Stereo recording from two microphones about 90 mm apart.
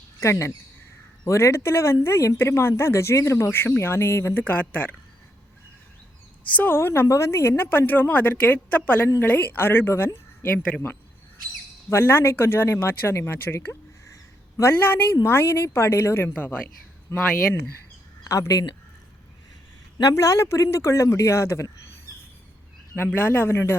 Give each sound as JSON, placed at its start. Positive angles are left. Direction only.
{"t": 0.2, "sound": "a man's voice", "side_deg": 30}
{"t": 6.6, "sound": "speech", "side_deg": 25}
{"t": 11.9, "sound": "speech", "side_deg": 25}
{"t": 18.2, "sound": "speech", "side_deg": 40}
{"t": 20.0, "sound": "a man's voice", "side_deg": 40}
{"t": 23.0, "sound": "speech", "side_deg": 25}